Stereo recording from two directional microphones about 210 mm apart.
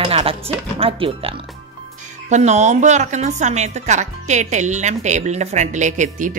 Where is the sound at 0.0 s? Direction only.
25° right (ahead or behind).